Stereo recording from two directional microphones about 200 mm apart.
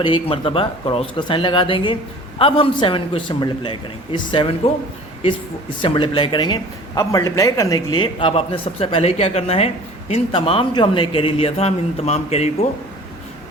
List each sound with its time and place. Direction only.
0.0 s speech: 25° left (ahead or behind)
5.8 s speech: 25° left (ahead or behind)